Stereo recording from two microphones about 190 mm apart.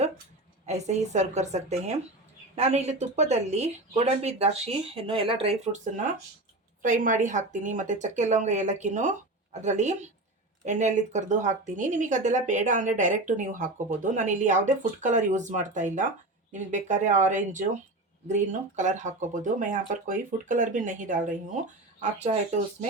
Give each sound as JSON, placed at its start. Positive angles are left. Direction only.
{"t": 0.6, "sound": "speech", "side_deg": -35}